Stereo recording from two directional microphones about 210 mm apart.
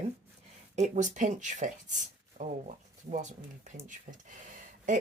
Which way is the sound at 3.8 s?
40° right (ahead or behind).